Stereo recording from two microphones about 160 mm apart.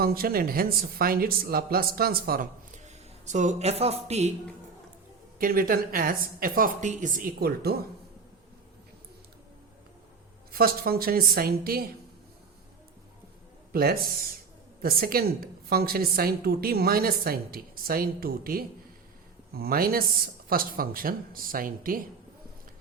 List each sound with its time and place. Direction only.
0.0 s speech: 65° right (ahead or behind); by 4.3 s 40° right (ahead or behind)
5.4 s speech: 60° right (ahead or behind)
10.5 s a woman's voice: 70° right (ahead or behind)
13.7 s a woman's voice: 65° right (ahead or behind)